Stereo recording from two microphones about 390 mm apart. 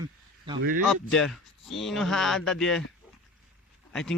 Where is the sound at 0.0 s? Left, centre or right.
Centre.